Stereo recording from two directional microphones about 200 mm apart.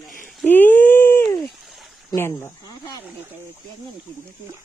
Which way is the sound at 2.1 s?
15° left (ahead or behind).